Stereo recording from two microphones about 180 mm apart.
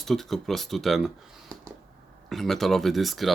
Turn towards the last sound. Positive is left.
turn(degrees=0)  # may be behind; listen again after turning